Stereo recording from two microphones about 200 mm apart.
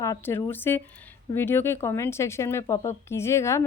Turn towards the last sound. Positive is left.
turn(degrees=15)  # may be behind; listen again after turning